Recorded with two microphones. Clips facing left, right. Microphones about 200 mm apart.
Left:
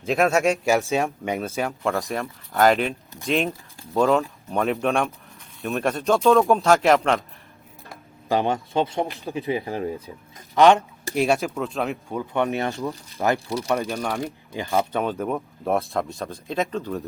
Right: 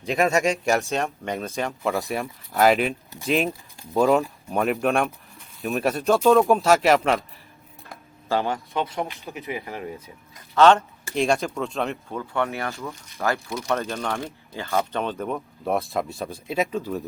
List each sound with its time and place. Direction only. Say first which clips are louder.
0.0 s speech: left 1 dB; centre (ahead or behind)
8.3 s speech: left 2 dB; 20° left (ahead or behind)
10.5 s speech: left 1 dB; 15° left (ahead or behind)
12.0 s speech: left 3 dB; 15° left (ahead or behind); by 17.0 s 5° right (ahead or behind)